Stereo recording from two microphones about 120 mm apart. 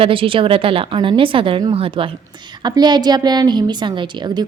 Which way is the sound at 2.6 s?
35° right (ahead or behind).